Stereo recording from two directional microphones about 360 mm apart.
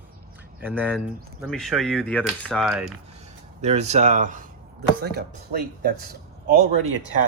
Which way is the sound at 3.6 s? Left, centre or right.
Centre.